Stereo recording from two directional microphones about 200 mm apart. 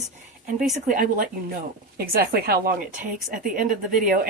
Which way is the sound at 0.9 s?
45° right (ahead or behind).